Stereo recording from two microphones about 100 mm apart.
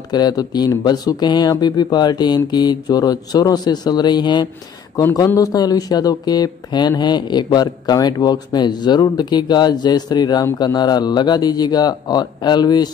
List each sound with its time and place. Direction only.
0.1 s speech: 40° left (ahead or behind)